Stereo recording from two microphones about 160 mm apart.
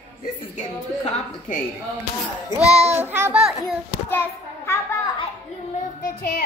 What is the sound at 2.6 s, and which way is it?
Speech, 40° right (ahead or behind).